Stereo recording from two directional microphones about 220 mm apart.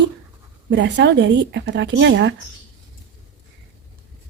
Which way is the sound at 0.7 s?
55° right (ahead or behind).